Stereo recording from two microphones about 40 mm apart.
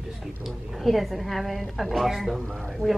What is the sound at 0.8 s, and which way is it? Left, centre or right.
A woman's voice, centre.